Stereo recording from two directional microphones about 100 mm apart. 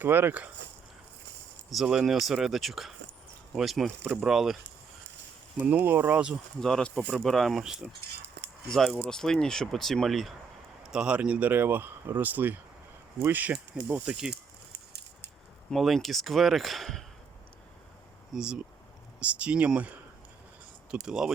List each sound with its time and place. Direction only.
0.0 s speech: 20° right (ahead or behind)
1.7 s speech: 5° right (ahead or behind)
5.5 s speech: 20° right (ahead or behind)
6.6 s speech: 5° left (ahead or behind)
10.9 s speech: 10° right (ahead or behind)
15.7 s speech: centre (ahead or behind)
18.3 s speech: 10° right (ahead or behind)